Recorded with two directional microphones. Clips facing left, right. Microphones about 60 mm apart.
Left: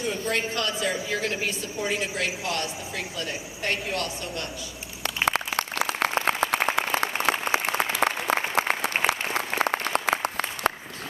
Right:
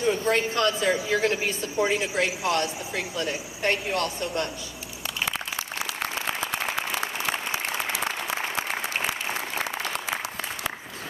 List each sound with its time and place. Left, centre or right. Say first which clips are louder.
0.0 s a woman's voice: right 4 dB; right
5.2 s a sound: left 6 dB; left
5.9 s applause: left 5 dB; left